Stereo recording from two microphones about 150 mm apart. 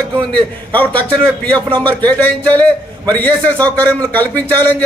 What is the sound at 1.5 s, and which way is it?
Speech, 35° right (ahead or behind).